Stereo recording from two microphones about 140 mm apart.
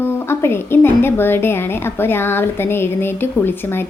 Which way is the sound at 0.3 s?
15° left (ahead or behind).